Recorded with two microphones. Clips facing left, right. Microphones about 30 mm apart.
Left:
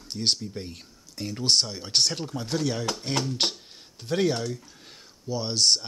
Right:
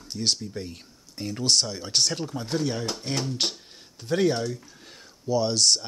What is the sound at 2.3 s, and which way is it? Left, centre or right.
Speech, left.